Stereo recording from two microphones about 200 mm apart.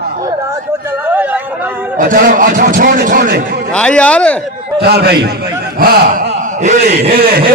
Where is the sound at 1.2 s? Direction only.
10° right (ahead or behind).